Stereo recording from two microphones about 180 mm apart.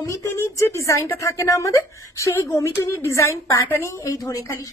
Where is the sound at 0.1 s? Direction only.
15° left (ahead or behind).